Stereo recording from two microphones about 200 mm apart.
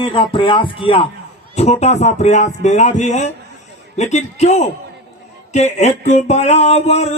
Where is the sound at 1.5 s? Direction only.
30° left (ahead or behind).